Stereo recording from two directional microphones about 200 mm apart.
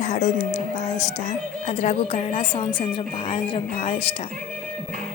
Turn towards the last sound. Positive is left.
turn(degrees=30)  # may be behind; listen again after turning